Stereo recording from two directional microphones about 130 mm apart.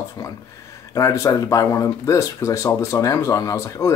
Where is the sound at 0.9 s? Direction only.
25° left (ahead or behind).